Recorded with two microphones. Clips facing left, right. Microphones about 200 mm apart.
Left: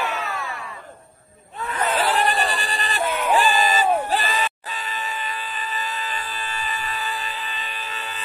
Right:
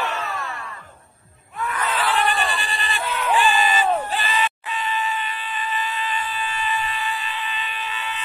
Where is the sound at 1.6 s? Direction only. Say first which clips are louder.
Even; 25° left (ahead or behind).